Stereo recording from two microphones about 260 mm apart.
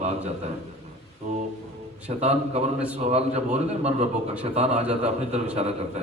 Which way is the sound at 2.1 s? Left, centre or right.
Right.